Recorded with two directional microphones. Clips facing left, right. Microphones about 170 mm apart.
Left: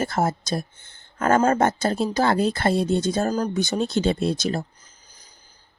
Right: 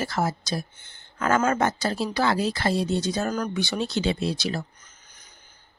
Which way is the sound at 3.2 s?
30° left (ahead or behind).